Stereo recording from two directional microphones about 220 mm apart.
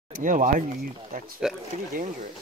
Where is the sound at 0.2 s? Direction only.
35° right (ahead or behind).